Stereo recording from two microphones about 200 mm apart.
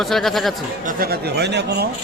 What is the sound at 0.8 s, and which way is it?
Speech, 45° right (ahead or behind).